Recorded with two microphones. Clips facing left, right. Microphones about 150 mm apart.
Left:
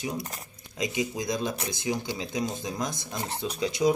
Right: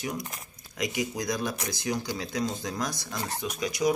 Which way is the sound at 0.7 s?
25° left (ahead or behind).